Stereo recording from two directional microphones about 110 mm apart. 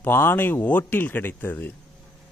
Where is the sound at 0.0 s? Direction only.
20° left (ahead or behind).